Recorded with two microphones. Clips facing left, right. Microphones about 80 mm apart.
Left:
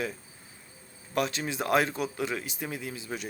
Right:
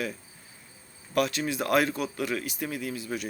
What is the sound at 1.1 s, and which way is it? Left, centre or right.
Speech, left.